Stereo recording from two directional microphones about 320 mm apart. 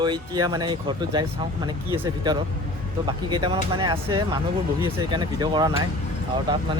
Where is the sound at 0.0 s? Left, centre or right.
Centre.